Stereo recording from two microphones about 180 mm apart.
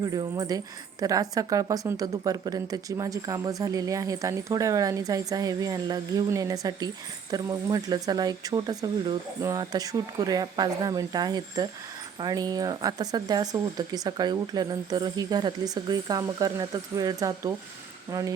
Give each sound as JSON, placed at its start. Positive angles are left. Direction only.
{"t": 0.0, "sound": "speech", "side_deg": -20}